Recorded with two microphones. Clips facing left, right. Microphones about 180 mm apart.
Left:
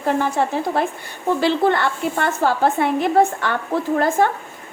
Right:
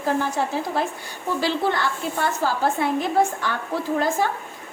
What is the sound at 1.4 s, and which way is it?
A woman's voice, 60° left (ahead or behind).